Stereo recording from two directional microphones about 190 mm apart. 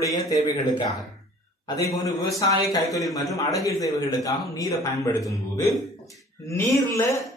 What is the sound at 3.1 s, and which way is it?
A man's voice, 15° left (ahead or behind).